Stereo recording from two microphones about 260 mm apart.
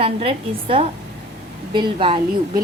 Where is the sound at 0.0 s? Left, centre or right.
Right.